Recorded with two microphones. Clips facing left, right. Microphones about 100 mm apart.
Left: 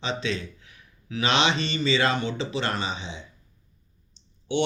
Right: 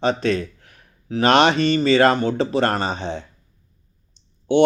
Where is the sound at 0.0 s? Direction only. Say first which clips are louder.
Right 9 dB; 50° right (ahead or behind).